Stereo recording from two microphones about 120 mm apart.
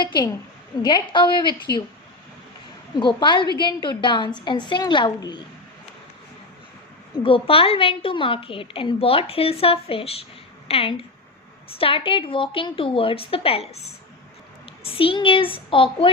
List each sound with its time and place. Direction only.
0.0 s a woman's voice: 40° left (ahead or behind)
3.0 s a woman's voice: 40° left (ahead or behind)
7.2 s a woman's voice: 45° left (ahead or behind)
14.8 s a woman's voice: 50° left (ahead or behind)